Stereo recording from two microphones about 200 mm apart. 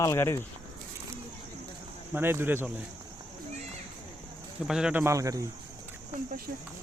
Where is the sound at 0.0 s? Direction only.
15° left (ahead or behind).